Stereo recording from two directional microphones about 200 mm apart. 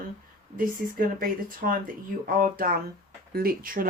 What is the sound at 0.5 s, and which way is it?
Speech, 45° right (ahead or behind).